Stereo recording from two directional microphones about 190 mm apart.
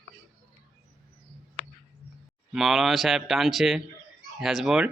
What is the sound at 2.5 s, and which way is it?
A man's voice, centre (ahead or behind).